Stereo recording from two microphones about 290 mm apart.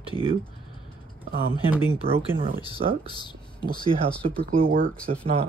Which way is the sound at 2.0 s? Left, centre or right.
Centre.